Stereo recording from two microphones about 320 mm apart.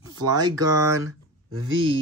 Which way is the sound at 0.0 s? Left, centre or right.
Centre.